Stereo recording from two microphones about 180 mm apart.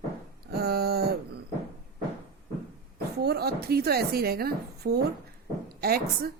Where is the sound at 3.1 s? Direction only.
60° right (ahead or behind).